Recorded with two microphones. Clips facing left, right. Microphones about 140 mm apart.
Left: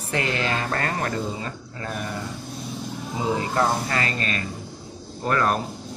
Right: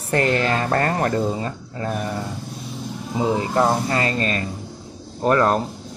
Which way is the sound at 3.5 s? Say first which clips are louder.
Right 4 dB; 25° right (ahead or behind).